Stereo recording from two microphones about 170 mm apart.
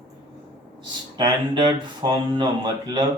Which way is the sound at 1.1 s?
25° right (ahead or behind).